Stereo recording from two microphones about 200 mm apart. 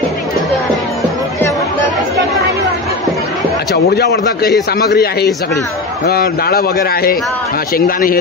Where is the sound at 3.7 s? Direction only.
55° left (ahead or behind).